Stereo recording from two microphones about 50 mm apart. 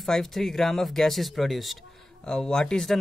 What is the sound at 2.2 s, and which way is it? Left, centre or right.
Speech, centre.